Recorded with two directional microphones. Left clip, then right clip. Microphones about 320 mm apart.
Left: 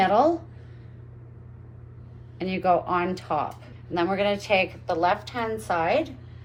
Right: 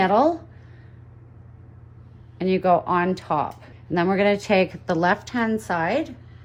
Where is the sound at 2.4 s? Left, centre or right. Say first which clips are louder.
Right 3 dB; right.